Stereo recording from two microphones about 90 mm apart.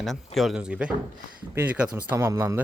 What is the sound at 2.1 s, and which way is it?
Speech, 30° right (ahead or behind).